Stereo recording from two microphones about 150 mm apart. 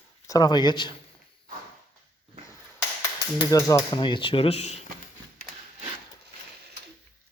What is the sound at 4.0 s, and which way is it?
Speech, 35° left (ahead or behind).